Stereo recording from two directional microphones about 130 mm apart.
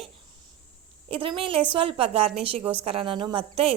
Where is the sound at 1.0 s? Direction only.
45° right (ahead or behind).